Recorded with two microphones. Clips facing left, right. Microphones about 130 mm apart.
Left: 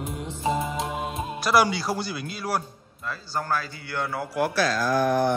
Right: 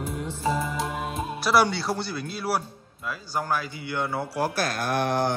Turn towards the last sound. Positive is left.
turn(degrees=-75)  # may be behind; listen again after turning